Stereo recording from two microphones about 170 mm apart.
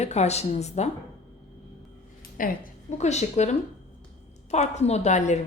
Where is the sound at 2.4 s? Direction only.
50° left (ahead or behind).